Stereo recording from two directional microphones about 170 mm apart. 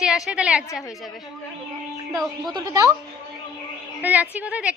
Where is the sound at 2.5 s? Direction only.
25° right (ahead or behind).